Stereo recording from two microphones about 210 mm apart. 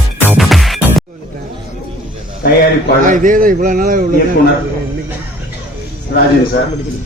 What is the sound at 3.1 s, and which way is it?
Speech, 40° right (ahead or behind).